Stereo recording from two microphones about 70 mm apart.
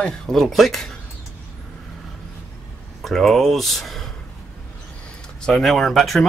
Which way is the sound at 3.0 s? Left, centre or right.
Centre.